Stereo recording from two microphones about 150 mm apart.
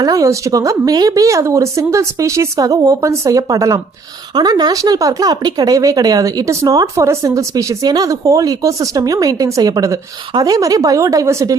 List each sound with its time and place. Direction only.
0.0 s speech: 25° right (ahead or behind)